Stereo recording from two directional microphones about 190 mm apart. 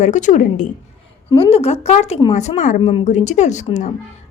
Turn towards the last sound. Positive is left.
turn(degrees=40)  # may be behind; listen again after turning